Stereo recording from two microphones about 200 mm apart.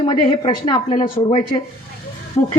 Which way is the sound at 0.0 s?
25° left (ahead or behind).